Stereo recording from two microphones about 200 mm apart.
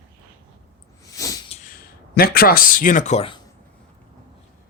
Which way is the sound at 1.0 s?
15° left (ahead or behind).